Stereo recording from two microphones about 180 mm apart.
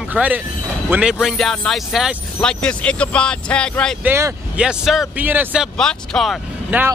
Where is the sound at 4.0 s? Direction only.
15° right (ahead or behind).